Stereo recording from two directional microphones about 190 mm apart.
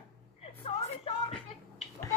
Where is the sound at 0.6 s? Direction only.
35° left (ahead or behind).